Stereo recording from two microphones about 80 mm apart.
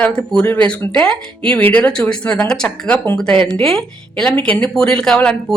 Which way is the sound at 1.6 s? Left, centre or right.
Left.